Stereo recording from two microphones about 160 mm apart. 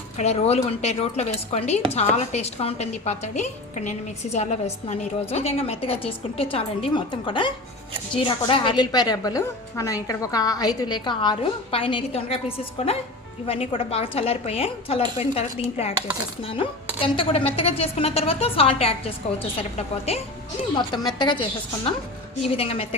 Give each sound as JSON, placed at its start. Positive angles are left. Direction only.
{"t": 0.2, "sound": "a woman's voice", "side_deg": 40}
{"t": 20.7, "sound": "a woman's voice", "side_deg": 30}
{"t": 22.4, "sound": "a woman's voice", "side_deg": 35}